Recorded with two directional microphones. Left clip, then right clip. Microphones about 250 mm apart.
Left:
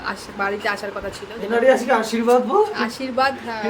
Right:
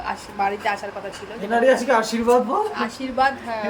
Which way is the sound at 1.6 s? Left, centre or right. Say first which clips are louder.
Left 1 dB; centre.